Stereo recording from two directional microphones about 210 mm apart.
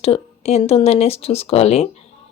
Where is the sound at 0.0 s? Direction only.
30° left (ahead or behind).